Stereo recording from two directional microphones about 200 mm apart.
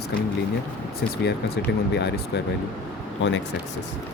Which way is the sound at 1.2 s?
55° left (ahead or behind).